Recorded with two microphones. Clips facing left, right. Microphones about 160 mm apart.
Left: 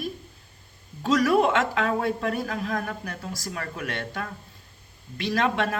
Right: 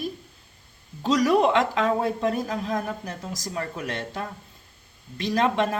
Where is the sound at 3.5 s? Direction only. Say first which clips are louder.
Right 3 dB; 25° right (ahead or behind).